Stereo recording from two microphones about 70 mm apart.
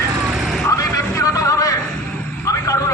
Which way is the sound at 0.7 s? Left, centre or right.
Left.